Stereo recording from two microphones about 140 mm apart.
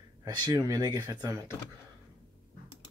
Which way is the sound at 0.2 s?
25° right (ahead or behind).